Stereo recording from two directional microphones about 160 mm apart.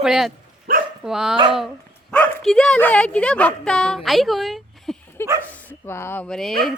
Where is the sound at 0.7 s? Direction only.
65° right (ahead or behind).